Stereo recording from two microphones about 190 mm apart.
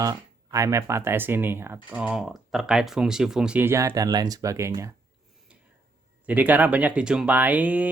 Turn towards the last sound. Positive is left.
turn(degrees=-10)  # may be behind; listen again after turning